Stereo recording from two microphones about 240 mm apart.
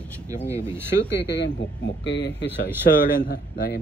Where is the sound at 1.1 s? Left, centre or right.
Left.